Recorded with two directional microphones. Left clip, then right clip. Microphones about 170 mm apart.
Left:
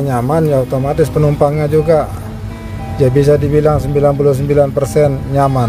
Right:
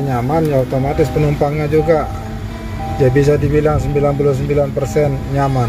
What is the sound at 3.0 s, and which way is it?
Speech, 20° left (ahead or behind).